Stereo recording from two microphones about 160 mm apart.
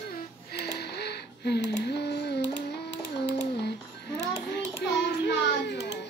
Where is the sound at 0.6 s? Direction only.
90° left.